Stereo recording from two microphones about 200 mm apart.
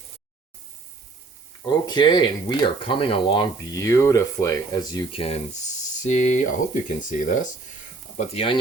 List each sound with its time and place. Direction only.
1.6 s speech: 20° left (ahead or behind)